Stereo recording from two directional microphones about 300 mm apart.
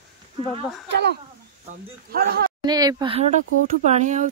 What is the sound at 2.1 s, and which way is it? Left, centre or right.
Speech, right.